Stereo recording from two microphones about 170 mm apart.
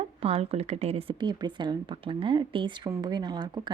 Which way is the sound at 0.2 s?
35° right (ahead or behind).